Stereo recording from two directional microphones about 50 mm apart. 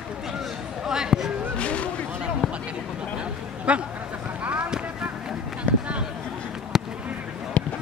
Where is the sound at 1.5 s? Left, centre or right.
Left.